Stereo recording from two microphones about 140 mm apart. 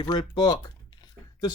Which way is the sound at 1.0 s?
30° left (ahead or behind).